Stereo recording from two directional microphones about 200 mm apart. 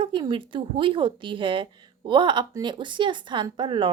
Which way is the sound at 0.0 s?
25° right (ahead or behind).